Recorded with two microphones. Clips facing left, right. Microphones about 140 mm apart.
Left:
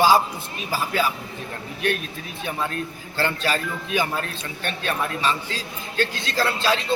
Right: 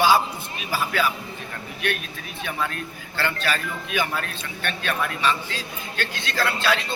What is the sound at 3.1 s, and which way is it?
Speech, 30° left (ahead or behind).